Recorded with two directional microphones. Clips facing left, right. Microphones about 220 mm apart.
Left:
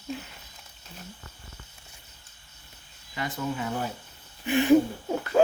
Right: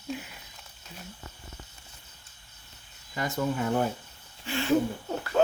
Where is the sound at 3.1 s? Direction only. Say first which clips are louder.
Right 2 dB; 45° right (ahead or behind).